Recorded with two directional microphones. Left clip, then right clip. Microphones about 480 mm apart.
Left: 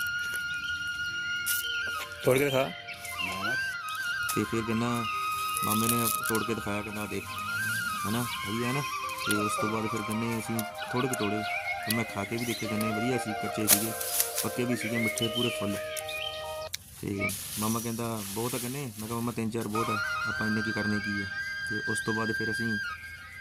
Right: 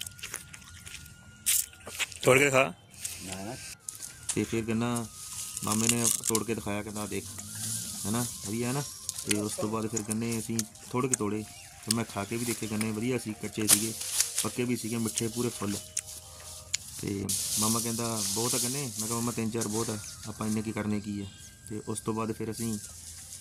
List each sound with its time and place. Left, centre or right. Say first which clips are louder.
2.2 s speech: right 3 dB; left
4.4 s speech: left 1 dB; centre
17.1 s speech: left 1 dB; centre